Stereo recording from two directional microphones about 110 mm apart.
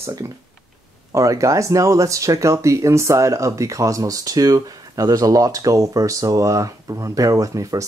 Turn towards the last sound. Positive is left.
turn(degrees=-30)  # may be behind; listen again after turning